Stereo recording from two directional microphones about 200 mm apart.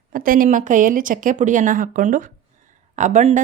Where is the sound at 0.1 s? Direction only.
45° right (ahead or behind).